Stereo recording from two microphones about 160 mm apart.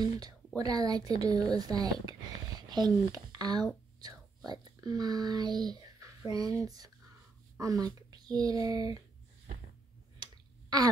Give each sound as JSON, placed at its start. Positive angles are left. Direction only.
{"t": 0.6, "sound": "a woman's voice", "side_deg": -25}
{"t": 10.1, "sound": "finger snapping", "side_deg": -25}